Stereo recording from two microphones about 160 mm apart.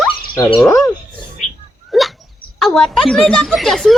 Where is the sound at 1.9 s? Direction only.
Centre (ahead or behind).